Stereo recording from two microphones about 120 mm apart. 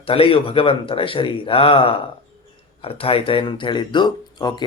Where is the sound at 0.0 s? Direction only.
50° left (ahead or behind).